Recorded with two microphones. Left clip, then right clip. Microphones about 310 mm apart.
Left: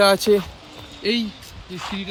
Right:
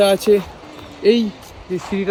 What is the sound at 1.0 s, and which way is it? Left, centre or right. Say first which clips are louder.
Speech: right 8 dB; centre.